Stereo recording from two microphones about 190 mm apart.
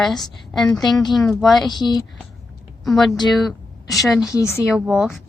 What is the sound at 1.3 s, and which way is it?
Speech, centre (ahead or behind).